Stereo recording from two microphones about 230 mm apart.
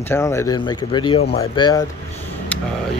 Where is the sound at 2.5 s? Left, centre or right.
Centre.